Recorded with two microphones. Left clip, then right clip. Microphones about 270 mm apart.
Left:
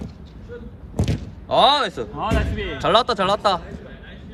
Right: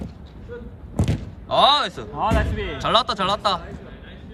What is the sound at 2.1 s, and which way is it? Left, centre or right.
Speech, right.